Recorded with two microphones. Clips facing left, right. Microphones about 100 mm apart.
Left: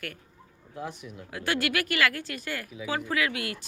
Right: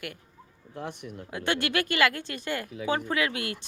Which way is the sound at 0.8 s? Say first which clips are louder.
Even; 55° right (ahead or behind).